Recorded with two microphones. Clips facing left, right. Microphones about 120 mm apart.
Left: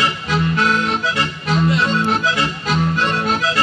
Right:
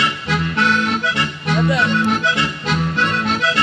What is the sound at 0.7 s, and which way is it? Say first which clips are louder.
Accordion: even; 30° left (ahead or behind).